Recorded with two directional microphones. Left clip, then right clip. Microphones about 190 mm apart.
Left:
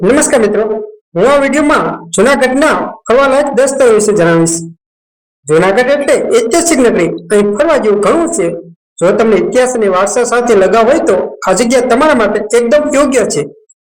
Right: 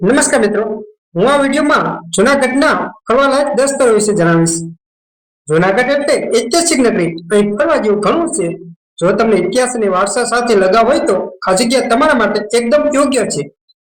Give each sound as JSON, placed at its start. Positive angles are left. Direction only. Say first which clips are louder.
{"t": 0.0, "sound": "speech", "louder": "left 3 dB", "side_deg": 20}